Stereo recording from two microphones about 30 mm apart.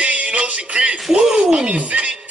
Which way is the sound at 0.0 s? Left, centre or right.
Right.